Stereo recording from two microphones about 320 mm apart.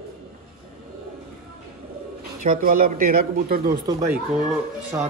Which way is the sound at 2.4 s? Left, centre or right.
Right.